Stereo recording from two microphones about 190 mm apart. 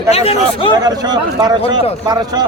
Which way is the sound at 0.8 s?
20° right (ahead or behind).